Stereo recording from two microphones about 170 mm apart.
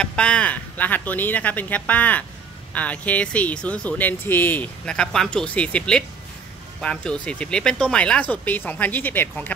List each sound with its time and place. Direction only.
0.0 s speech: 5° left (ahead or behind)